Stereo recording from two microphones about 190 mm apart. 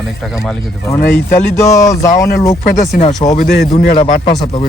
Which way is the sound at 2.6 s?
40° left (ahead or behind).